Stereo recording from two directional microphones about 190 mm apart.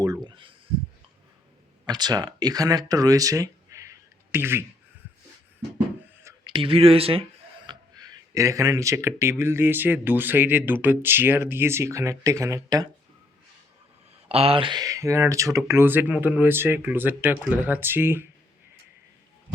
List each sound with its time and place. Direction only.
0.0 s a sound: 20° right (ahead or behind)
1.9 s speech: 20° right (ahead or behind)
6.2 s speech: 25° right (ahead or behind)
7.7 s a sound: 20° right (ahead or behind)
9.4 s speech: 10° right (ahead or behind)
14.3 s speech: 30° right (ahead or behind); by 18.3 s 10° right (ahead or behind)